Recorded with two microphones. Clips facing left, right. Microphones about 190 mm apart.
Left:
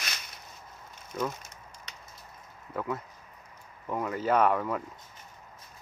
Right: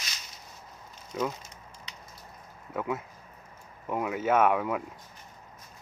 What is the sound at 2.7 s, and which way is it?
Speech, 5° right (ahead or behind).